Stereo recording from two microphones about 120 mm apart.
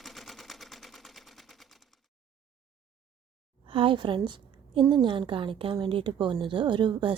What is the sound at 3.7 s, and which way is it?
A woman's voice, 45° right (ahead or behind).